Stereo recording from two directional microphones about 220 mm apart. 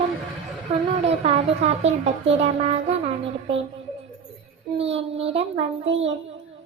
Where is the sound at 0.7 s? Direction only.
25° right (ahead or behind).